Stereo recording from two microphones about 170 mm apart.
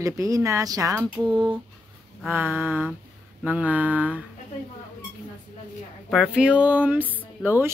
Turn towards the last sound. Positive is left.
turn(degrees=-10)  # may be behind; listen again after turning